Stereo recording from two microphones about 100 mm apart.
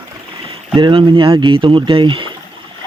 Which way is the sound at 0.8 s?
55° right (ahead or behind).